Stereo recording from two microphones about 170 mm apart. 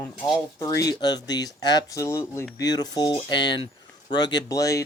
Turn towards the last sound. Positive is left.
turn(degrees=20)  # may be behind; listen again after turning